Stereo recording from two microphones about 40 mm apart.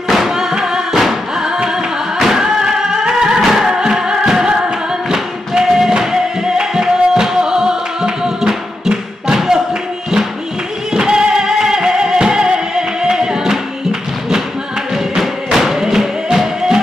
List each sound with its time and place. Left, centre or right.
0.4 s music: centre
10.9 s music: centre
15.1 s music: centre